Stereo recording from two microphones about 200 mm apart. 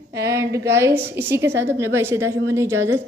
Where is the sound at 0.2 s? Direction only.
15° right (ahead or behind).